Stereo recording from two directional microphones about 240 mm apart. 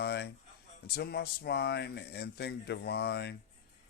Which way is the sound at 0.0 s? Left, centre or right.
Left.